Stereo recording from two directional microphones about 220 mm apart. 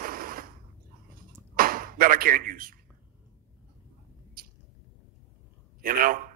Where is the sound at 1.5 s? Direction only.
40° right (ahead or behind).